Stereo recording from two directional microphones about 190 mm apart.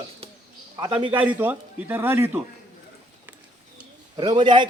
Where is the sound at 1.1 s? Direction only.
10° right (ahead or behind).